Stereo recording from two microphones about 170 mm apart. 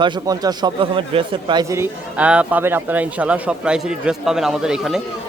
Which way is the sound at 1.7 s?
10° right (ahead or behind).